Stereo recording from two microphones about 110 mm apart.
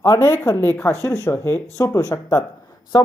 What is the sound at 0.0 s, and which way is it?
Speech, 25° left (ahead or behind).